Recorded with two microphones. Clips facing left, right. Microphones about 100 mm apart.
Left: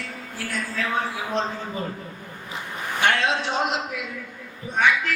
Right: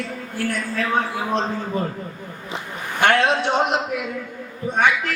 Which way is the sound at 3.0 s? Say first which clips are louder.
Right 5 dB; 55° right (ahead or behind).